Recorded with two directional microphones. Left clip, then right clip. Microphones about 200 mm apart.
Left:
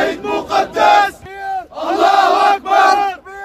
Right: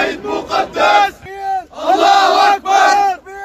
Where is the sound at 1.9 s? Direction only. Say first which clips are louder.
Right 2 dB; 40° right (ahead or behind).